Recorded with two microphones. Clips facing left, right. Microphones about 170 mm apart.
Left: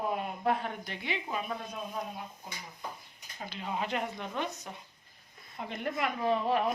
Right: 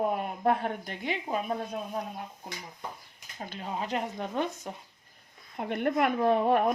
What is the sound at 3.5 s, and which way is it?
Speech, 40° right (ahead or behind).